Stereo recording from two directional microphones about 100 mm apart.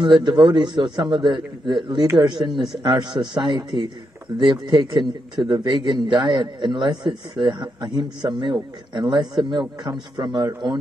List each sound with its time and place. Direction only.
0.0 s a man's voice: 50° right (ahead or behind)
2.5 s a man's voice: centre (ahead or behind)
2.9 s a man's voice: 50° right (ahead or behind)